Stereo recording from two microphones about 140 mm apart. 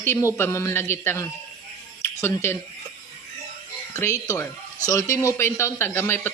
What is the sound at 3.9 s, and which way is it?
Speech, 20° left (ahead or behind).